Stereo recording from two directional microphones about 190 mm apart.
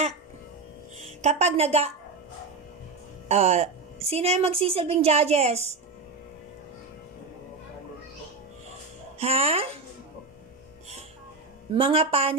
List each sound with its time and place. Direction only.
1.2 s a woman's voice: 35° right (ahead or behind)
3.2 s a woman's voice: 35° right (ahead or behind)
9.2 s a woman's voice: 30° right (ahead or behind)
11.7 s a woman's voice: 30° right (ahead or behind)